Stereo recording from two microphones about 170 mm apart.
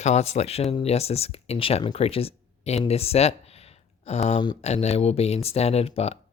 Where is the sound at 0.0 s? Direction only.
40° left (ahead or behind).